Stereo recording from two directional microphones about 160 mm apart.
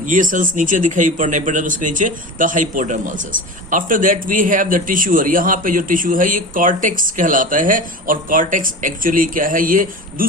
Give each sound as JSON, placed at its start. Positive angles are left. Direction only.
{"t": 0.0, "sound": "speech", "side_deg": -55}